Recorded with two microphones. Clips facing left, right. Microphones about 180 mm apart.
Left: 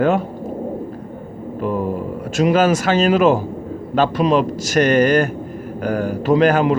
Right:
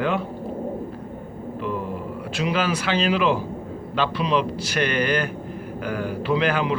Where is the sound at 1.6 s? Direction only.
45° left (ahead or behind).